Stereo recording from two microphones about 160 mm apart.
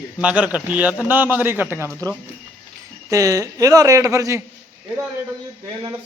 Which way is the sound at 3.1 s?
20° right (ahead or behind).